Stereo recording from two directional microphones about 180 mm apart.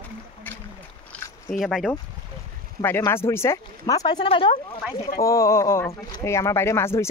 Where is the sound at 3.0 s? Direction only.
15° left (ahead or behind); by 4.6 s 30° left (ahead or behind).